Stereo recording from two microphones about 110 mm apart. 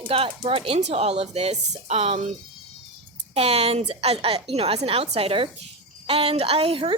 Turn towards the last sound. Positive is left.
turn(degrees=-55)  # may be behind; listen again after turning